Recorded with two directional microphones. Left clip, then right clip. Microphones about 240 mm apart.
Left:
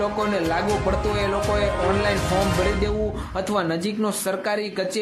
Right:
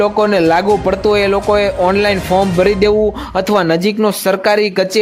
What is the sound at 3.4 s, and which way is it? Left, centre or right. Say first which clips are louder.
Speech: right 11 dB; right.